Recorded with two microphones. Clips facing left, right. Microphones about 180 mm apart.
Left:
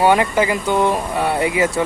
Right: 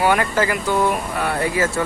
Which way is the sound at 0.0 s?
20° left (ahead or behind).